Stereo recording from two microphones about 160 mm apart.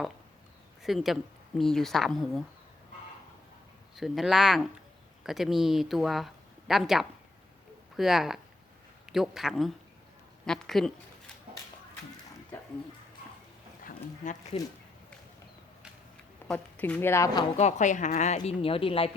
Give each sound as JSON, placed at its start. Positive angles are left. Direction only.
{"t": 0.8, "sound": "a woman's voice", "side_deg": 0}
{"t": 3.9, "sound": "a woman's voice", "side_deg": 0}
{"t": 13.8, "sound": "a sound", "side_deg": 50}
{"t": 16.5, "sound": "a woman's voice", "side_deg": 10}
{"t": 17.6, "sound": "a woman's voice", "side_deg": 50}